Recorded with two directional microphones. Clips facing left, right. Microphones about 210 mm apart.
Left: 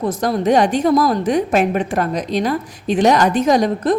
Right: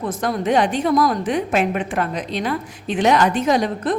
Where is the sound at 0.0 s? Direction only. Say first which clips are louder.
Left 4 dB; 35° left (ahead or behind).